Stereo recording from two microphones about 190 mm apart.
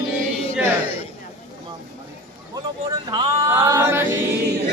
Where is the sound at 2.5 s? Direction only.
20° right (ahead or behind).